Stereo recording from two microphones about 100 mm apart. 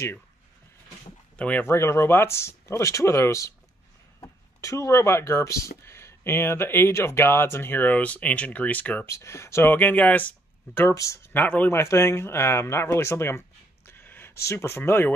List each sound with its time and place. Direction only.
1.3 s speech: 15° left (ahead or behind)
1.7 s speech: 25° left (ahead or behind)
4.6 s speech: 30° left (ahead or behind)
9.0 s speech: 30° left (ahead or behind)
11.3 s speech: 15° left (ahead or behind)
13.8 s a sound: 20° left (ahead or behind)